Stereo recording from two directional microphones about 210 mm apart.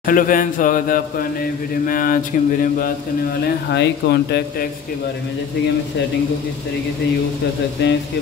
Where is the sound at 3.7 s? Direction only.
55° left (ahead or behind).